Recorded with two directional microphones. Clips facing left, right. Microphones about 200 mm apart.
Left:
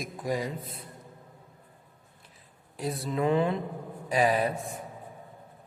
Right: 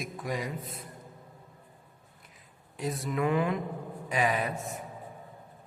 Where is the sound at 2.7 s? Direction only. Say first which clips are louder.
Left 1 dB; 35° left (ahead or behind).